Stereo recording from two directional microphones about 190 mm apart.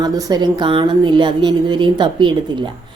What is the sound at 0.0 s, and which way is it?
A woman's voice, 20° right (ahead or behind).